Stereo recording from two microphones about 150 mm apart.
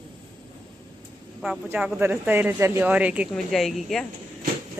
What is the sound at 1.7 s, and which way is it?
Speech, 10° right (ahead or behind).